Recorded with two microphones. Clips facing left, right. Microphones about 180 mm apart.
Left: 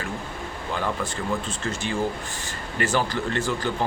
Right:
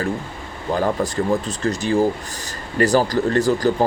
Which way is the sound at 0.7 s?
40° right (ahead or behind).